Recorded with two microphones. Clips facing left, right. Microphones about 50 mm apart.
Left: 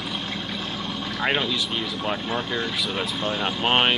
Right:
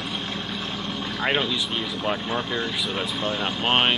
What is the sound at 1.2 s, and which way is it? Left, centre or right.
Speech, centre.